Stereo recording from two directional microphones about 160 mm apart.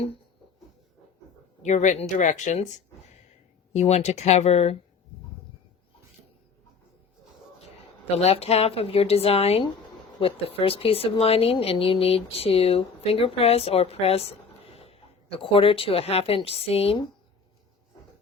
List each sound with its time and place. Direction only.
1.6 s speech: 50° left (ahead or behind)
3.7 s speech: 40° left (ahead or behind)
8.1 s speech: 40° left (ahead or behind)